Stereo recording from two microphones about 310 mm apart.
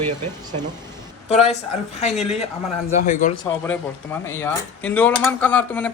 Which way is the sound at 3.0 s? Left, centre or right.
Left.